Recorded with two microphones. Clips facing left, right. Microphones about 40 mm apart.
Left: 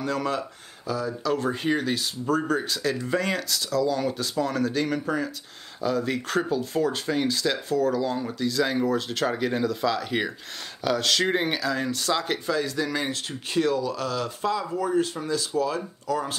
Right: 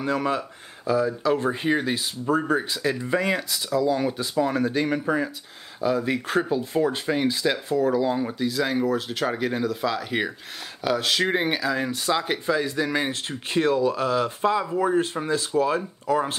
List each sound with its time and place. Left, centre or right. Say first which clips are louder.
0.0 s speech: right 2 dB; right